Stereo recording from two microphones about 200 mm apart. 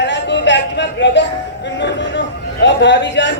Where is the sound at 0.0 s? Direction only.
60° left (ahead or behind).